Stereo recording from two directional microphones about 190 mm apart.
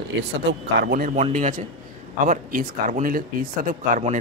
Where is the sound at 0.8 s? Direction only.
50° right (ahead or behind).